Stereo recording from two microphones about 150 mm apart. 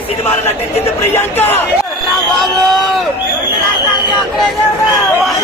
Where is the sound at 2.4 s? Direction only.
Centre (ahead or behind).